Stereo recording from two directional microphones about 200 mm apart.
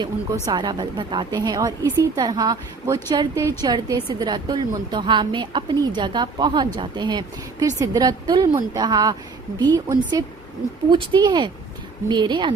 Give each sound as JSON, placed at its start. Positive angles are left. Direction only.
{"t": 0.4, "sound": "a woman's voice", "side_deg": -20}